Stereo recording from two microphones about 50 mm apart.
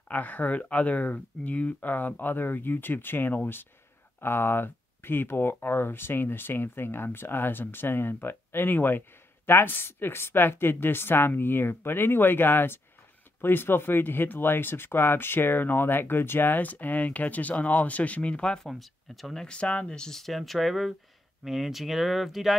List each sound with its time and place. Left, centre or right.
0.1 s speech: left
18.6 s speech: centre
19.4 s speech: left
20.1 s speech: centre